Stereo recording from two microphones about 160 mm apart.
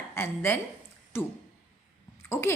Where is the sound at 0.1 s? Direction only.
15° left (ahead or behind).